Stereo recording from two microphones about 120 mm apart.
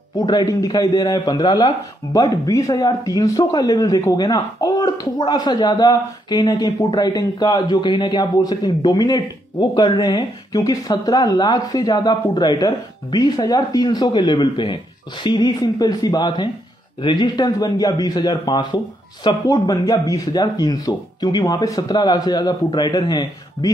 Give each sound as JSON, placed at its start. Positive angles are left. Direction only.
{"t": 0.2, "sound": "speech", "side_deg": 35}